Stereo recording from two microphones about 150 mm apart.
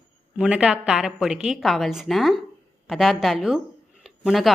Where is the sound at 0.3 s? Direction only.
5° right (ahead or behind).